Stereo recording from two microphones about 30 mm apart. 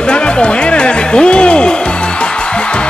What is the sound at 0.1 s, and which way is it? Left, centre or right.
Music, left.